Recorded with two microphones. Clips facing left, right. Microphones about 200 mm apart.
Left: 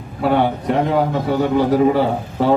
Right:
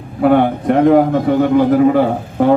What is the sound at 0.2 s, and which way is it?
A man's voice, 55° right (ahead or behind).